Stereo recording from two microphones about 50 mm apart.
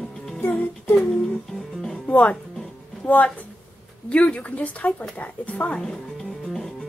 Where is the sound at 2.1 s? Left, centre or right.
Left.